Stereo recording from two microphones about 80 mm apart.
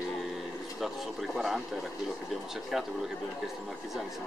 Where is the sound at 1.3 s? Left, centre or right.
Centre.